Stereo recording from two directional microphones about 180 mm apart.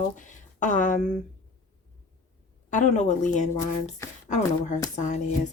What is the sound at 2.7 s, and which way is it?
Speech, 45° left (ahead or behind).